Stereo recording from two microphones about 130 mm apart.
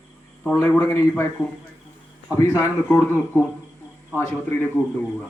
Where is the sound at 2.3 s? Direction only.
20° left (ahead or behind).